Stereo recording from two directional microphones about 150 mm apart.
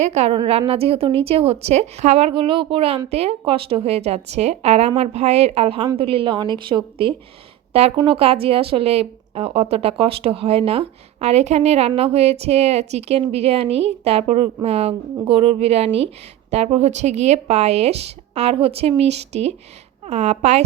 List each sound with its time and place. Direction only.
0.0 s speech: 45° right (ahead or behind)
7.7 s speech: 45° right (ahead or behind)